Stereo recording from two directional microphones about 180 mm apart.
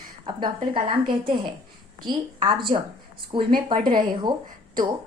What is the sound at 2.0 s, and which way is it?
A woman's voice, 25° right (ahead or behind).